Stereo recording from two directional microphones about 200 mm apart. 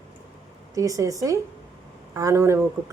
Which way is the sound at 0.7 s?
15° right (ahead or behind).